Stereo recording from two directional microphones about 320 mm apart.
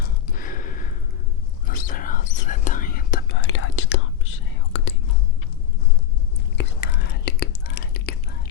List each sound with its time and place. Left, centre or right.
0.0 s a sound: left
1.6 s whispering: left
6.6 s whispering: left